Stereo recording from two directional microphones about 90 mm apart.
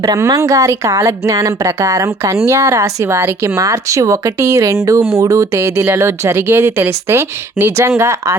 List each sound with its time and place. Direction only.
0.3 s a woman's voice: 40° right (ahead or behind)